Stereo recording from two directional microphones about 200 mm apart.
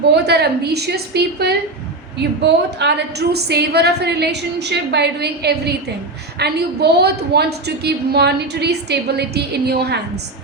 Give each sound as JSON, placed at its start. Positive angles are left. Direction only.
{"t": 0.1, "sound": "a woman's voice", "side_deg": -55}